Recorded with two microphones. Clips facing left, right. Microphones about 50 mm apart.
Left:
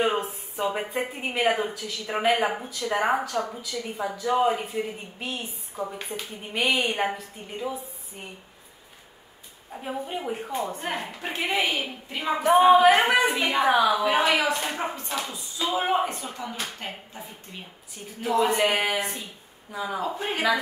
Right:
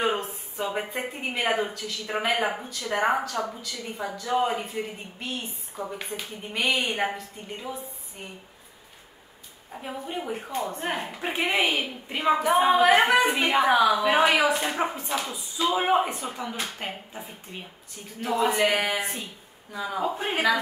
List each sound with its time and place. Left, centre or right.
0.0 s a sound: centre
0.7 s a woman's voice: centre
9.8 s a woman's voice: centre
10.9 s speech: centre
12.4 s a woman's voice: centre
15.7 s speech: centre
18.2 s a woman's voice: centre
20.0 s speech: centre